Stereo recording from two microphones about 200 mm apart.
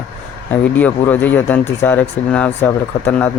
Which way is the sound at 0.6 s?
5° left (ahead or behind).